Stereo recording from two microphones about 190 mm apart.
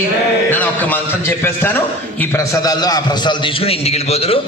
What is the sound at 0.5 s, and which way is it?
A man's voice, 10° left (ahead or behind).